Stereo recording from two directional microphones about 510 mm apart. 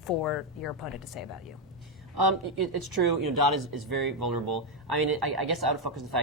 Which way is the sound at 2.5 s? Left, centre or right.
Right.